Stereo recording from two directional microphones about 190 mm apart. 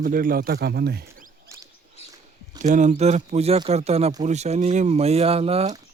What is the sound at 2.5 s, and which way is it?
Speech, 40° right (ahead or behind).